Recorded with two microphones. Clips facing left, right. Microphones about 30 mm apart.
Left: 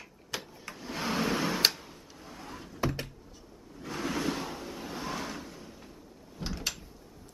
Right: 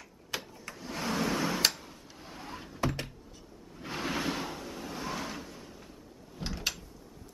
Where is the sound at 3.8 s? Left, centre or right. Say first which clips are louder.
Left 1 dB; centre.